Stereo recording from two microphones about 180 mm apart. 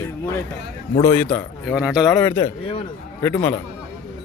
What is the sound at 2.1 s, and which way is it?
A man's voice, 10° left (ahead or behind).